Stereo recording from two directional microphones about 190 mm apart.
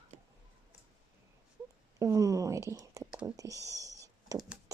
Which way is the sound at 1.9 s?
15° right (ahead or behind).